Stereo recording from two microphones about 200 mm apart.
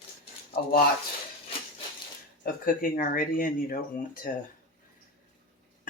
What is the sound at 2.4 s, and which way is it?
Speech, 45° left (ahead or behind).